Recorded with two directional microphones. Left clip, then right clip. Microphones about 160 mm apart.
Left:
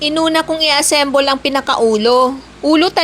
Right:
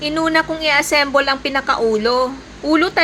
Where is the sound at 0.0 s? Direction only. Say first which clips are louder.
Left 3 dB; 40° left (ahead or behind).